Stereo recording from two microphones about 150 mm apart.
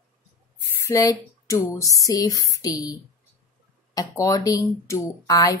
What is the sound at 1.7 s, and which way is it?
A woman's voice, 20° left (ahead or behind).